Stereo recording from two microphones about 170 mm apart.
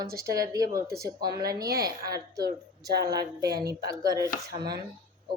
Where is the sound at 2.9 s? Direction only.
70° right (ahead or behind).